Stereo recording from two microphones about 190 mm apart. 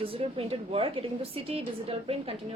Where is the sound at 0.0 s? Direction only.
30° right (ahead or behind).